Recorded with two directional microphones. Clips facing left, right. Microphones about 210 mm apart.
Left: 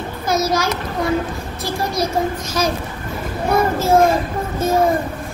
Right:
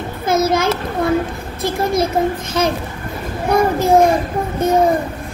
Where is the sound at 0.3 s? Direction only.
55° right (ahead or behind).